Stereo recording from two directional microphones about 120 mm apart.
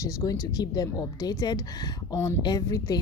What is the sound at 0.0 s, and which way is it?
A woman's voice, 30° left (ahead or behind).